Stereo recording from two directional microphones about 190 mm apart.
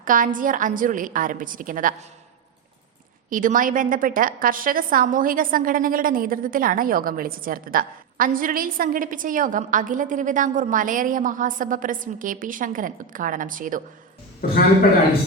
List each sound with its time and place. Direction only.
0.0 s a woman's voice: 45° right (ahead or behind)
3.2 s a woman's voice: 45° right (ahead or behind)
14.4 s a man's voice: 50° left (ahead or behind)